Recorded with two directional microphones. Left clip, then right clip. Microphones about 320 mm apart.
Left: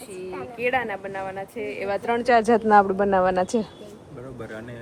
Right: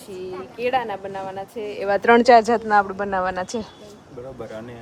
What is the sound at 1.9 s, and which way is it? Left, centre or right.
Speech, right.